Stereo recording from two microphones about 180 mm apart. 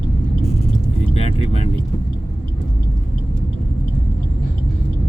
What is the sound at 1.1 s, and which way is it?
Vehicle, 35° left (ahead or behind).